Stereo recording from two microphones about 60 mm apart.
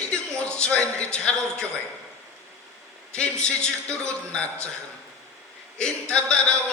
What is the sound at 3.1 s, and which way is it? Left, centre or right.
A man's voice, centre.